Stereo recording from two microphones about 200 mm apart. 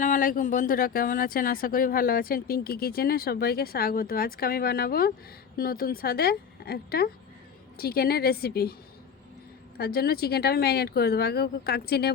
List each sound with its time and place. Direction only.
0.0 s a woman's voice: 40° left (ahead or behind)
9.7 s a woman's voice: 50° left (ahead or behind)